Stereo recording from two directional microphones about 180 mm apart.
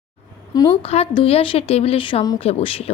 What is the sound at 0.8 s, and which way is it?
Speech, 30° left (ahead or behind).